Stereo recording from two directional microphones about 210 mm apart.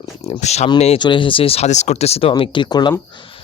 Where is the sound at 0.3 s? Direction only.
30° left (ahead or behind).